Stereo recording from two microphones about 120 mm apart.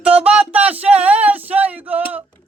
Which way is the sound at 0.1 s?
10° right (ahead or behind).